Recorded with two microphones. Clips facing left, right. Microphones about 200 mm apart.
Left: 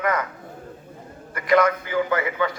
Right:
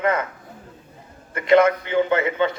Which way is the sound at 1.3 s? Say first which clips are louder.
Right 3 dB; 25° right (ahead or behind).